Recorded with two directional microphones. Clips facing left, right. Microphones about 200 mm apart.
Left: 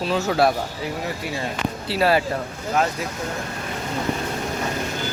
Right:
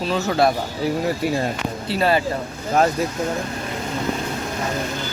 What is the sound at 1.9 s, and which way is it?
Speech, 5° left (ahead or behind).